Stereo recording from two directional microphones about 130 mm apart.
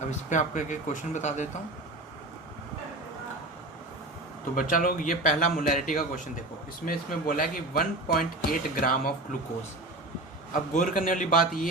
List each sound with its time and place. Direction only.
0.1 s speech: 70° left (ahead or behind)
4.5 s speech: 90° left
10.5 s speech: 90° left